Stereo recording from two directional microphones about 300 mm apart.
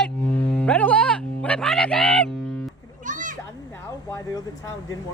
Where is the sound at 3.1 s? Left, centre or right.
Right.